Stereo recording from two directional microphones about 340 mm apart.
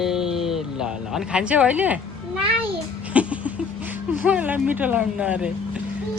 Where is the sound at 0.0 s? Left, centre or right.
Centre.